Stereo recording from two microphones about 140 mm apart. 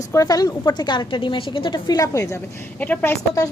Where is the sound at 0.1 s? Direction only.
25° left (ahead or behind).